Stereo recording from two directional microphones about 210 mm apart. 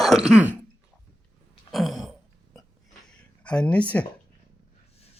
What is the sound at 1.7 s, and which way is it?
Throat clearing, centre (ahead or behind).